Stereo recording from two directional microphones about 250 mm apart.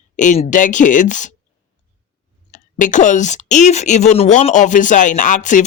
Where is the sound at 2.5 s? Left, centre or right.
Left.